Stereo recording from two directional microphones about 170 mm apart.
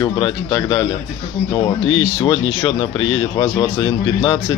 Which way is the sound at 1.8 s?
30° left (ahead or behind).